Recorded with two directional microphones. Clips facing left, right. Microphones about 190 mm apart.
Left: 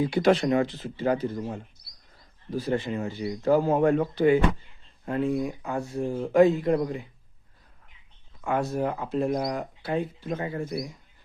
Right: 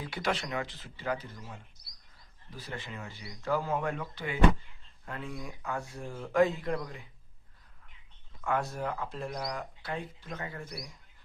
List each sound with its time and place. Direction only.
0.2 s speech: 40° left (ahead or behind)
1.4 s speech: 50° left (ahead or behind)
2.5 s speech: 35° left (ahead or behind)
5.0 s speech: 25° left (ahead or behind)
8.4 s speech: 20° left (ahead or behind)